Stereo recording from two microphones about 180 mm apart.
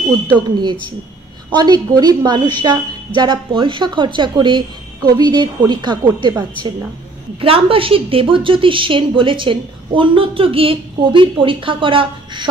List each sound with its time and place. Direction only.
0.3 s a woman's voice: 25° right (ahead or behind)